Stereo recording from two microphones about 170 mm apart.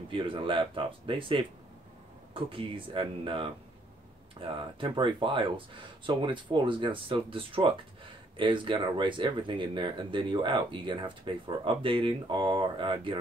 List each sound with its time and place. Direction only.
0.1 s speech: 30° right (ahead or behind)